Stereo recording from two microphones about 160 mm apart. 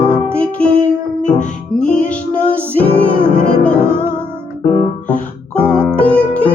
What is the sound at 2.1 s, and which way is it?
Music, 10° left (ahead or behind).